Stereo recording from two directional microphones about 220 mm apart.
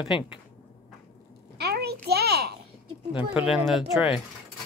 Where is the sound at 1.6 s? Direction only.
45° right (ahead or behind).